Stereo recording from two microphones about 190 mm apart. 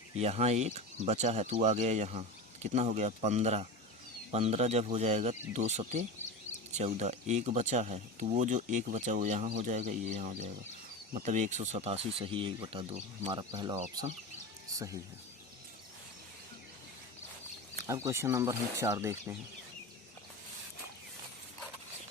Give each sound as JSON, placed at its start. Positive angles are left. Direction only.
{"t": 0.2, "sound": "speech", "side_deg": -35}
{"t": 14.7, "sound": "bird", "side_deg": -20}
{"t": 17.8, "sound": "speech", "side_deg": -15}